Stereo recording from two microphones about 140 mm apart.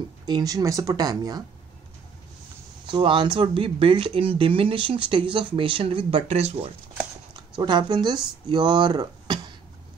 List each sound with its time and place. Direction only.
0.3 s speech: 25° right (ahead or behind)
2.9 s speech: 35° right (ahead or behind)
7.5 s speech: 30° right (ahead or behind)